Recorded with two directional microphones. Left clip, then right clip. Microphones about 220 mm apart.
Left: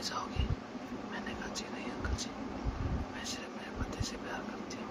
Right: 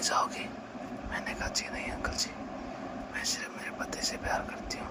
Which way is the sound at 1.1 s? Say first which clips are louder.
Right 8 dB; 30° right (ahead or behind).